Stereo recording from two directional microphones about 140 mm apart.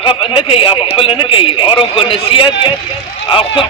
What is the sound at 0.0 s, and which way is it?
A man's voice, 40° left (ahead or behind).